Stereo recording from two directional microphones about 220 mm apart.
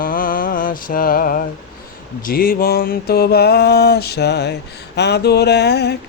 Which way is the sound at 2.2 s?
40° left (ahead or behind).